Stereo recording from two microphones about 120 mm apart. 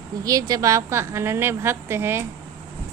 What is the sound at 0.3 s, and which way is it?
Speech, 30° right (ahead or behind).